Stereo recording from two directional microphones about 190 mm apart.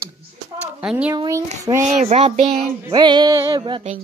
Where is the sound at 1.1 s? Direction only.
20° right (ahead or behind).